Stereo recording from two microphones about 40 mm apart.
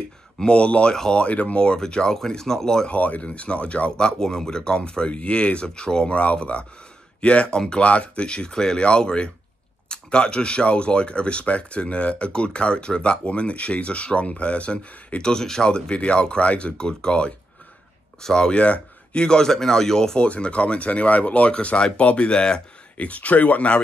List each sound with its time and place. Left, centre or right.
0.4 s speech: left; by 2.9 s centre
2.9 s speech: left
6.1 s speech: left
7.5 s speech: centre
7.8 s speech: left
8.3 s speech: centre
15.2 s speech: centre; by 16.7 s left
16.7 s speech: centre
19.2 s speech: centre
20.2 s speech: left
22.9 s speech: left